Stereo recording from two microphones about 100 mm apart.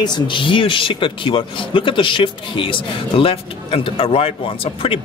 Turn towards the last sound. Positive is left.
turn(degrees=70)  # may be behind; listen again after turning